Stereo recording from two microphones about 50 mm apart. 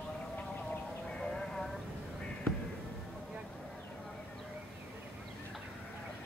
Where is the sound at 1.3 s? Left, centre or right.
Centre.